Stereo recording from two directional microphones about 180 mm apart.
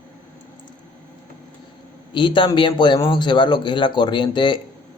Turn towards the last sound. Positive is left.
turn(degrees=25)  # may be behind; listen again after turning